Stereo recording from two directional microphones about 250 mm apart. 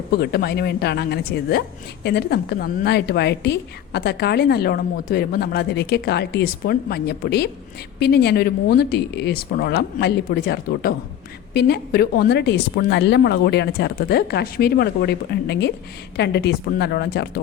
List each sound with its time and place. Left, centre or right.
0.2 s a woman's voice: left